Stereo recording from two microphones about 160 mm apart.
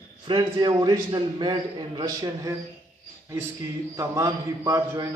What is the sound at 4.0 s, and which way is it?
A man's voice, 20° right (ahead or behind).